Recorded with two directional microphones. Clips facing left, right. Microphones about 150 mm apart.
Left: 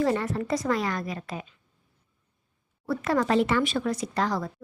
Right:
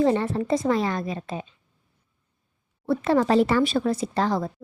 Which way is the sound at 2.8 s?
25° right (ahead or behind).